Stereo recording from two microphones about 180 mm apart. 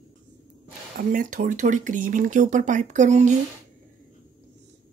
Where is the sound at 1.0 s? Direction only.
45° right (ahead or behind).